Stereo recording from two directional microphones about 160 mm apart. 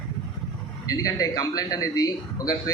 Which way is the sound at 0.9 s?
25° left (ahead or behind).